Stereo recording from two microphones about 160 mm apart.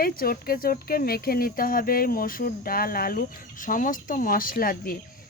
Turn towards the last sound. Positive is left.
turn(degrees=65)  # may be behind; listen again after turning